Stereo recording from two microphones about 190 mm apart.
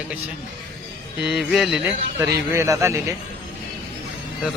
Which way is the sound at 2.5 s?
15° right (ahead or behind).